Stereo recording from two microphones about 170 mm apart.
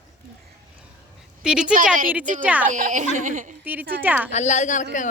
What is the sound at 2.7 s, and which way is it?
Speech, 50° right (ahead or behind).